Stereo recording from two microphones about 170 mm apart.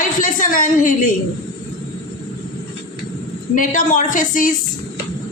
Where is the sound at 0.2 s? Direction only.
50° left (ahead or behind).